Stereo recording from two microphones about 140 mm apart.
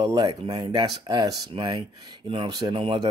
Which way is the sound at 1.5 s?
40° right (ahead or behind).